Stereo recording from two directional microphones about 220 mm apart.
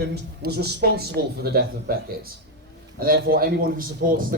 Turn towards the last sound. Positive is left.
turn(degrees=-40)  # may be behind; listen again after turning